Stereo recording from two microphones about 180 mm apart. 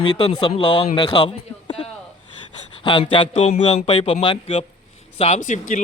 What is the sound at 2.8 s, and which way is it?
Speech, 25° left (ahead or behind).